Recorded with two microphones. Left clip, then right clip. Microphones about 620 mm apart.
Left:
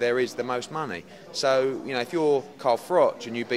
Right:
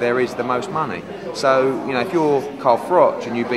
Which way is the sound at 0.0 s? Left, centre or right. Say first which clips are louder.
Right 6 dB; left.